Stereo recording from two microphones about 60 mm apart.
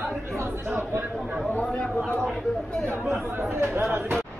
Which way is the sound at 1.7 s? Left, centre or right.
Centre.